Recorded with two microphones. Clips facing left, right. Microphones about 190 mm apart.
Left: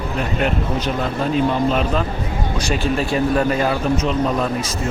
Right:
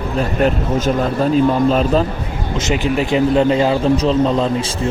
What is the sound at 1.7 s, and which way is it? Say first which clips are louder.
Speech: right 5 dB; 35° right (ahead or behind).